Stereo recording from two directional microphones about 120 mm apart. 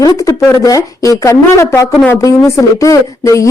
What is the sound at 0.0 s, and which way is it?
Speech, 30° left (ahead or behind).